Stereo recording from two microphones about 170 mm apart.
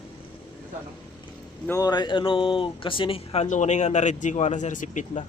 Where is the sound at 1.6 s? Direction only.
20° left (ahead or behind); by 5.2 s 50° left (ahead or behind).